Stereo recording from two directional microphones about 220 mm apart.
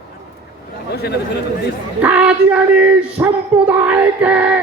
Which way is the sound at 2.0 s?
5° right (ahead or behind).